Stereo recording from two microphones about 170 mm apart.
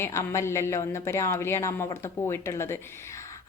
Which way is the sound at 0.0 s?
15° left (ahead or behind).